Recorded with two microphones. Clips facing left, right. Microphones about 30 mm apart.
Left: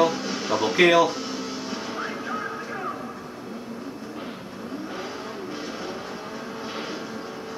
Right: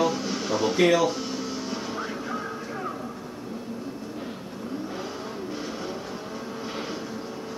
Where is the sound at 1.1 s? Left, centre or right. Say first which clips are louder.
Even; centre.